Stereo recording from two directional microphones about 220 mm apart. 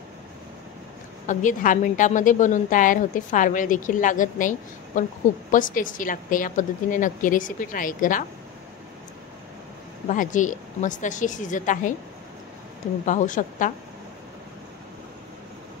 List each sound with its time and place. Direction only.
1.2 s a woman's voice: 35° left (ahead or behind)
10.0 s a woman's voice: 35° left (ahead or behind)
13.0 s a woman's voice: 35° left (ahead or behind)